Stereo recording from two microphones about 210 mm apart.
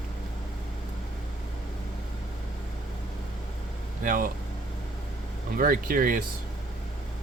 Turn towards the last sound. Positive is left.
turn(degrees=-40)  # may be behind; listen again after turning